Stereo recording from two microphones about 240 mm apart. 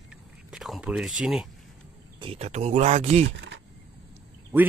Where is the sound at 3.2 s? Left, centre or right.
Right.